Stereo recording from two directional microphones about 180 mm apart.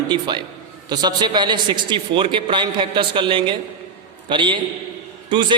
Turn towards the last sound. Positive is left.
turn(degrees=-25)  # may be behind; listen again after turning